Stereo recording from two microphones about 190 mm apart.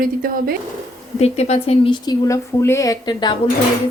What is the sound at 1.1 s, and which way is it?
A woman's voice, 35° left (ahead or behind).